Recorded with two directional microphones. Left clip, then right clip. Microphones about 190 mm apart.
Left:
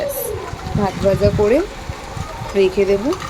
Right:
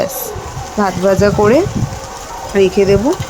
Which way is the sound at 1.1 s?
25° right (ahead or behind).